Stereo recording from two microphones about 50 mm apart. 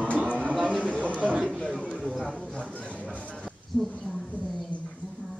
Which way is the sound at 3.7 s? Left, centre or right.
Centre.